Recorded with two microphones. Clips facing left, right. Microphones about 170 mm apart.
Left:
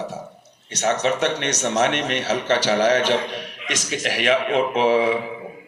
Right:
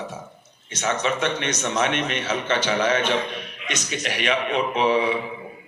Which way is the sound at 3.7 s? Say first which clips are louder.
Left 3 dB; 90° left.